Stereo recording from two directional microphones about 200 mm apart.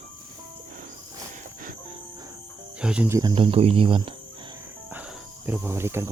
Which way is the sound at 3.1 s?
25° right (ahead or behind).